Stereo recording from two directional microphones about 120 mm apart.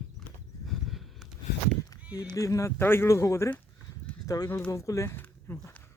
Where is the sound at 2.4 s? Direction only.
25° left (ahead or behind).